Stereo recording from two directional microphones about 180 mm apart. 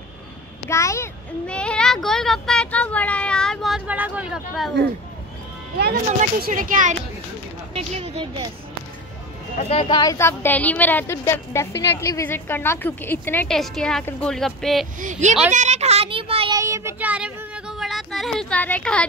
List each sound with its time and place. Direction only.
0.7 s a child's voice: 15° left (ahead or behind); by 4.7 s centre (ahead or behind)
5.8 s speech: 60° right (ahead or behind)
7.7 s speech: 35° right (ahead or behind)
9.6 s speech: 35° left (ahead or behind)
9.9 s a woman's voice: 15° left (ahead or behind); by 14.9 s centre (ahead or behind)
15.0 s speech: 45° right (ahead or behind)
15.5 s a sound: 40° right (ahead or behind)
16.5 s child singing: 15° right (ahead or behind); by 19.0 s 5° left (ahead or behind)